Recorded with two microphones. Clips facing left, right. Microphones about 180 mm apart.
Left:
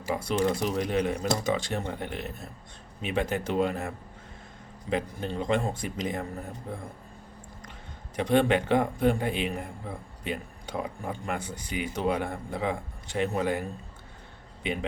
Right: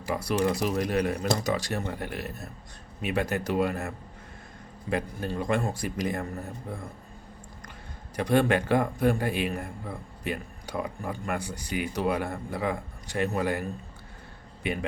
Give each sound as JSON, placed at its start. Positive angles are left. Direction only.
{"t": 0.1, "sound": "speech", "side_deg": 25}
{"t": 8.1, "sound": "a man's voice", "side_deg": 25}